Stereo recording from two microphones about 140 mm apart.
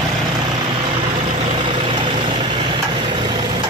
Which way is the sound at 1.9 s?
35° right (ahead or behind).